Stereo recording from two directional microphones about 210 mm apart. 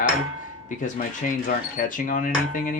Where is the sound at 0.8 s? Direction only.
40° left (ahead or behind).